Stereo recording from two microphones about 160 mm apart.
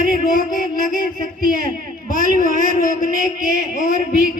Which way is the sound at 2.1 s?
55° left (ahead or behind).